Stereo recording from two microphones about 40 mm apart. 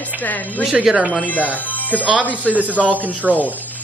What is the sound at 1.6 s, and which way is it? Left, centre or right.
Speech, left.